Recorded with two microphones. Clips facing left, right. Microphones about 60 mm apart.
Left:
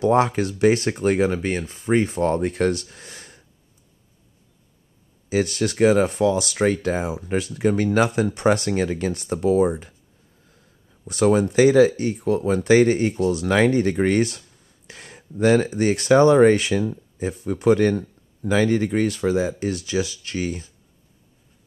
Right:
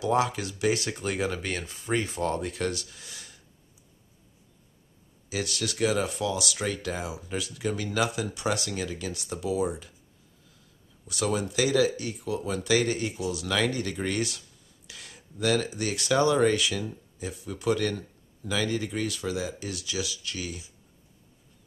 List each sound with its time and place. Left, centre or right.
0.0 s speech: left
5.3 s speech: left
11.1 s speech: left